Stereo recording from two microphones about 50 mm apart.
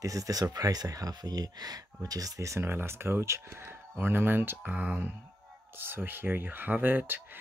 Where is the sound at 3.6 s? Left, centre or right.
Right.